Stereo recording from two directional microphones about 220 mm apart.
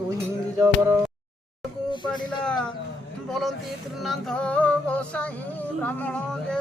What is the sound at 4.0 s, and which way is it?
Music, centre (ahead or behind).